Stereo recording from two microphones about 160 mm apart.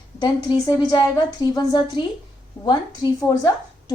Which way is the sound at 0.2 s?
25° left (ahead or behind).